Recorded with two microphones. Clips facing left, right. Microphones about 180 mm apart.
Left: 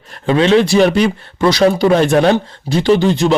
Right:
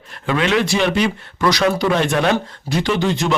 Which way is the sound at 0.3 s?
30° left (ahead or behind).